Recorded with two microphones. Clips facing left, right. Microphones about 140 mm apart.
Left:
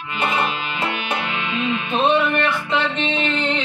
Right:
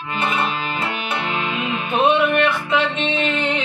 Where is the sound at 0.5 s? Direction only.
40° right (ahead or behind).